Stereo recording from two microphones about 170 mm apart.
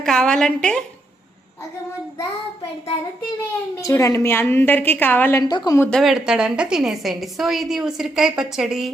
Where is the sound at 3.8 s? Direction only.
20° left (ahead or behind).